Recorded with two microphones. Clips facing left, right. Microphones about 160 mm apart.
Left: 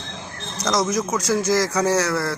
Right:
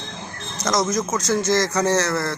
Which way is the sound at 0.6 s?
10° left (ahead or behind).